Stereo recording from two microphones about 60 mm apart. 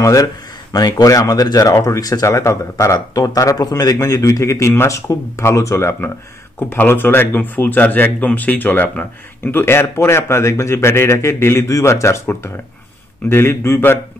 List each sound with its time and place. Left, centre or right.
0.0 s speech: left
0.7 s speech: left
6.7 s speech: left
11.6 s speech: left